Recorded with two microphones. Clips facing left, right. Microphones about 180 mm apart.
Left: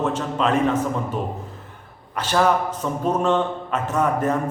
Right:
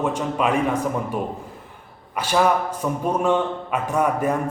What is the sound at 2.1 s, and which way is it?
A man's voice, 10° right (ahead or behind).